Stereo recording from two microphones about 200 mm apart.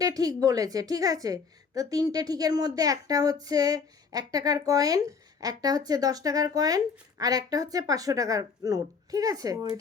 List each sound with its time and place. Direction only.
0.0 s a woman's voice: 20° right (ahead or behind)